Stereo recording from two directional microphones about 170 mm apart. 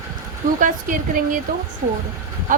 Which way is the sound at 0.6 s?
50° right (ahead or behind).